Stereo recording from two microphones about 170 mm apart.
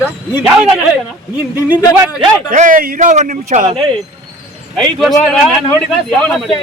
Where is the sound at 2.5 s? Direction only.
50° right (ahead or behind).